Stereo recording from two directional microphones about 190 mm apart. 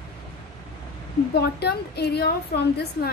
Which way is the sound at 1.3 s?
60° left (ahead or behind).